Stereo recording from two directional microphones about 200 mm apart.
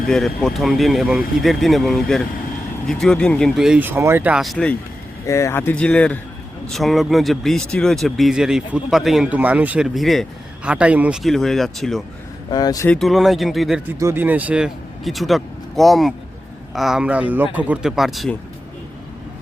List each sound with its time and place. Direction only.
0.1 s speech: centre (ahead or behind)
12.5 s speech: 20° left (ahead or behind)
12.9 s speech: centre (ahead or behind)